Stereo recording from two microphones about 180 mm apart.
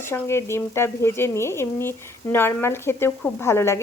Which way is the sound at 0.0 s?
15° left (ahead or behind).